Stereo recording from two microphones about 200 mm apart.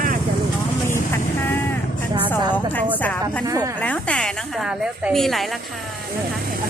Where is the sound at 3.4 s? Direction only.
15° right (ahead or behind).